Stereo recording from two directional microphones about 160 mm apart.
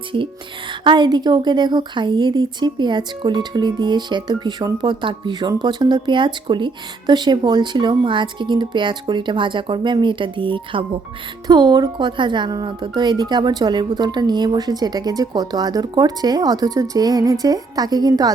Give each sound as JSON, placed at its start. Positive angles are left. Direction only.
{"t": 0.7, "sound": "a woman's voice", "side_deg": -30}